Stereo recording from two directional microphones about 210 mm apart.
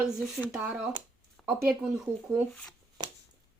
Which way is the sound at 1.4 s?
5° left (ahead or behind).